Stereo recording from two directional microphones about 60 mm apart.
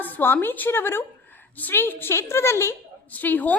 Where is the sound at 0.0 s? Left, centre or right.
Left.